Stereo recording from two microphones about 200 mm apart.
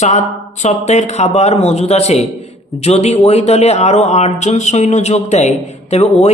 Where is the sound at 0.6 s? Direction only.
35° left (ahead or behind).